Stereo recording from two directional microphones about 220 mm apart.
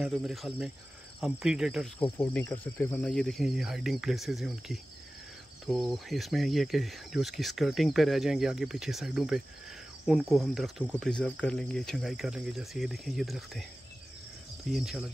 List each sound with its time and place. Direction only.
0.0 s speech: centre (ahead or behind)
2.1 s speech: 10° left (ahead or behind)
14.7 s speech: centre (ahead or behind)